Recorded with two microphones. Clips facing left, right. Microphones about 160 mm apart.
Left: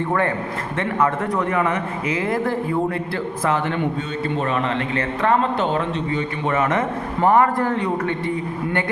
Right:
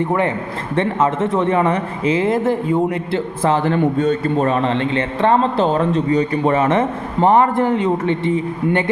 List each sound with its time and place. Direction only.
0.8 s speech: 25° right (ahead or behind)